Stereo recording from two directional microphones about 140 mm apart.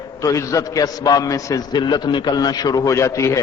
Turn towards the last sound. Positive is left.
turn(degrees=20)  # may be behind; listen again after turning